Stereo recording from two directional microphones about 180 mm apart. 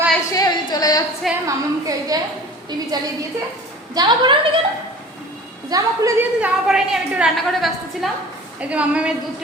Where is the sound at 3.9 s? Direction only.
20° right (ahead or behind).